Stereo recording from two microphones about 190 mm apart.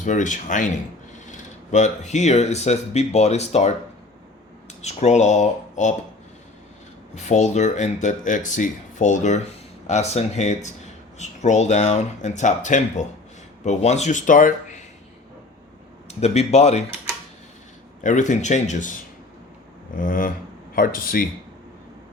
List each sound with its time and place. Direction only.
0.0 s speech: 40° left (ahead or behind)
1.7 s speech: 35° left (ahead or behind)
4.8 s speech: 35° left (ahead or behind)
7.2 s speech: 40° left (ahead or behind)
16.0 s speech: 35° left (ahead or behind)
18.0 s speech: 40° left (ahead or behind)
20.0 s speech: 45° left (ahead or behind)